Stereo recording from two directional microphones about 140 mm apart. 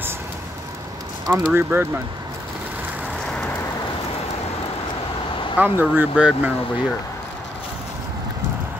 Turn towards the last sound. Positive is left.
turn(degrees=-10)  # may be behind; listen again after turning